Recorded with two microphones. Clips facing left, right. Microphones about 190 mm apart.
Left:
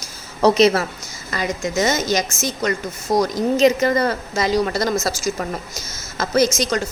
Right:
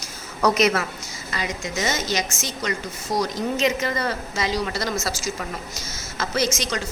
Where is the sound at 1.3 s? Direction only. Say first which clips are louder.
Left 6 dB; 45° left (ahead or behind).